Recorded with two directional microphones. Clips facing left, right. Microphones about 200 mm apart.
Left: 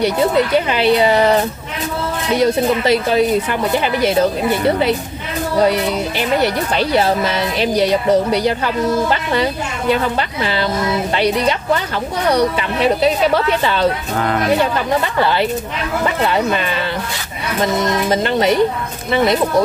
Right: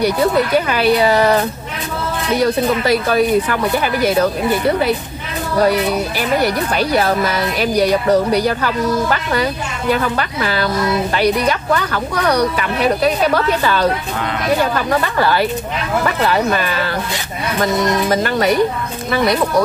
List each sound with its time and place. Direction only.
0.7 s speech: 25° left (ahead or behind)
14.1 s speech: 45° left (ahead or behind)
14.6 s speech: 25° left (ahead or behind)
18.1 s speech: 25° left (ahead or behind)